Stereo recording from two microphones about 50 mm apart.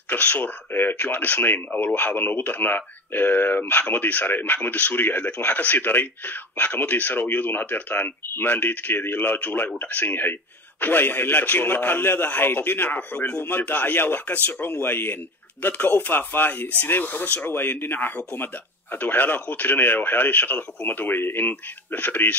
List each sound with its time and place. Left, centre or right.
0.1 s speech: left